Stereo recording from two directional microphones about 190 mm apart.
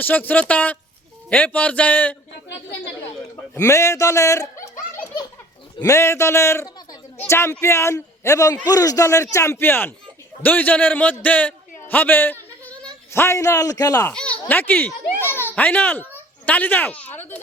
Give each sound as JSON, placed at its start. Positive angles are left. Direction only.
{"t": 0.0, "sound": "a man's voice", "side_deg": 10}
{"t": 2.5, "sound": "speech", "side_deg": 60}
{"t": 3.6, "sound": "a man's voice", "side_deg": 15}
{"t": 5.8, "sound": "a man's voice", "side_deg": 15}
{"t": 14.1, "sound": "a sound", "side_deg": 5}
{"t": 16.1, "sound": "a child's voice", "side_deg": 10}